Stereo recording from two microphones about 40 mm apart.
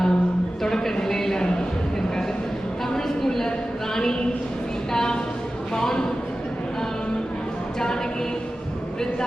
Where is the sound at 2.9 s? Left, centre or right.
Centre.